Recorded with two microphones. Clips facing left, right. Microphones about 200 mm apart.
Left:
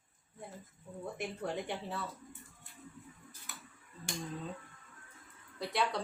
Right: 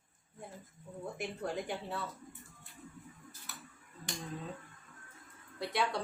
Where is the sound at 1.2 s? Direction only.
Centre (ahead or behind).